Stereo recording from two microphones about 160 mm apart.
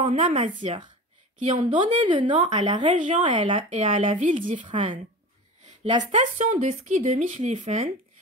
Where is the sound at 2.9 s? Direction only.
50° right (ahead or behind).